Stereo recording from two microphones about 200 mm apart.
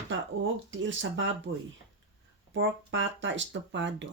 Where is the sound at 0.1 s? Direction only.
70° right (ahead or behind).